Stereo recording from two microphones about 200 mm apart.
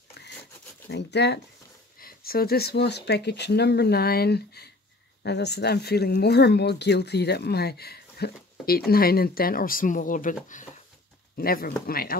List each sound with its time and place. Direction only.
0.8 s speech: 60° left (ahead or behind)
2.0 s speech: 45° left (ahead or behind)